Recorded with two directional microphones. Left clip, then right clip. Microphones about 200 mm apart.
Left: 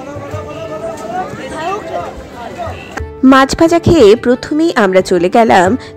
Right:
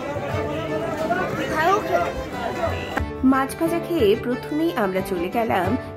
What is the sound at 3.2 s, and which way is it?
Speech, 40° left (ahead or behind).